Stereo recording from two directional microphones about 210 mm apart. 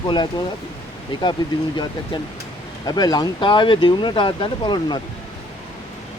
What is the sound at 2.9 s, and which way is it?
Speech, 20° left (ahead or behind).